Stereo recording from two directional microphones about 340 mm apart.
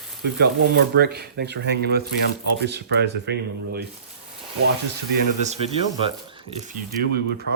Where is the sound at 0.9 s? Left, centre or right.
Right.